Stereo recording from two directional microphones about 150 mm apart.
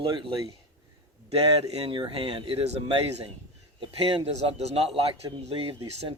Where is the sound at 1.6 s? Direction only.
40° right (ahead or behind).